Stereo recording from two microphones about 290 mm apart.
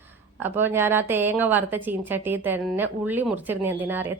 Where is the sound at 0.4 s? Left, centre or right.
Centre.